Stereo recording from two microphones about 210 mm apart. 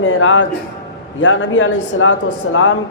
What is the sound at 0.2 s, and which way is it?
A man's voice, 70° left (ahead or behind).